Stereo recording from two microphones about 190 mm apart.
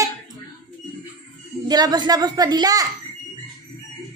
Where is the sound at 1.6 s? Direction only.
20° right (ahead or behind).